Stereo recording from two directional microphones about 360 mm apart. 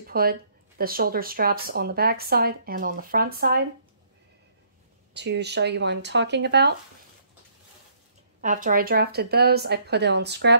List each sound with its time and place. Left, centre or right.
0.0 s speech: right
5.1 s speech: right
8.4 s speech: right